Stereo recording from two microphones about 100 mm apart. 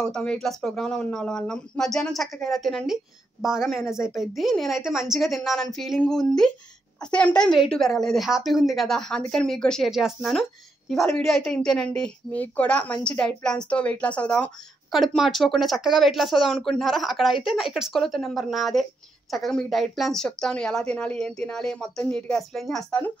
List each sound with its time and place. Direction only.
0.0 s a woman's voice: 10° left (ahead or behind)
14.9 s a woman's voice: centre (ahead or behind)
22.8 s a woman's voice: 15° left (ahead or behind)